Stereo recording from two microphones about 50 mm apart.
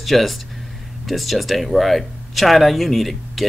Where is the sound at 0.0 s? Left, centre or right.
Centre.